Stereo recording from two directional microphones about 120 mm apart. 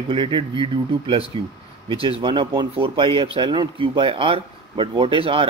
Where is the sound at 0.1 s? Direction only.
45° right (ahead or behind).